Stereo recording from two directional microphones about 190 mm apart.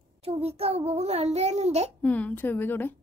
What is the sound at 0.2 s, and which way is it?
A child's voice, 30° right (ahead or behind).